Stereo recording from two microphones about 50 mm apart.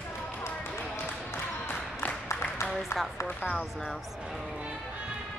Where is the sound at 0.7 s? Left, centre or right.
Left.